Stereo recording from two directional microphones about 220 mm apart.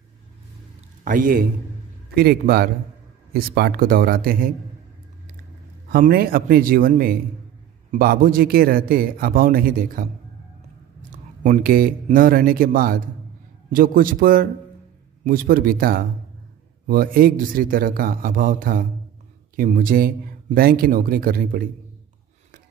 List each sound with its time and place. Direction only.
1.0 s a man's voice: 40° right (ahead or behind)
5.9 s a man's voice: 40° right (ahead or behind)